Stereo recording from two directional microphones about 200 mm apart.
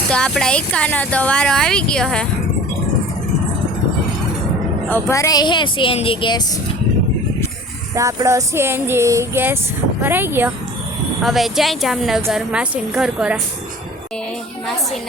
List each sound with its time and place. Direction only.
0.1 s speech: 5° left (ahead or behind)
4.9 s speech: 10° left (ahead or behind)
7.9 s music: 15° right (ahead or behind)
11.2 s speech: centre (ahead or behind)